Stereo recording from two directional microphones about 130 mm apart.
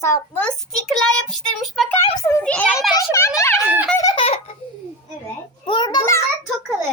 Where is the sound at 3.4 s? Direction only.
20° left (ahead or behind).